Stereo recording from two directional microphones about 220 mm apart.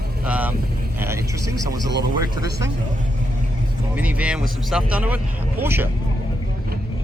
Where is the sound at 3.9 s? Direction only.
5° right (ahead or behind).